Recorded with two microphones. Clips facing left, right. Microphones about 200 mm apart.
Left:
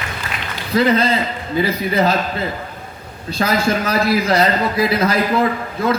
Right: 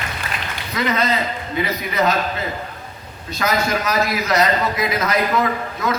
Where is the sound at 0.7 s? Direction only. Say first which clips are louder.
Left 5 dB; 30° left (ahead or behind).